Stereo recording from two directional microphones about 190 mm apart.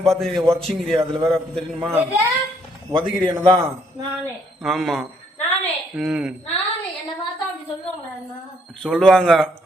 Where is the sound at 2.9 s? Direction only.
25° right (ahead or behind).